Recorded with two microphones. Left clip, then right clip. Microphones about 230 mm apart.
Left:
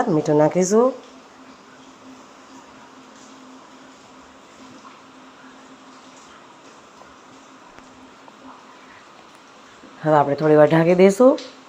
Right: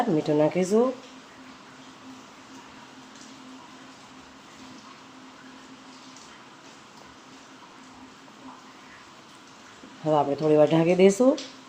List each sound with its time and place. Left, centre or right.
0.2 s speech: centre
10.0 s speech: centre